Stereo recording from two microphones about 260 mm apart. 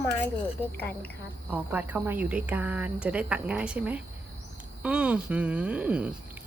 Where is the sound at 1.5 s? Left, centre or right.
Centre.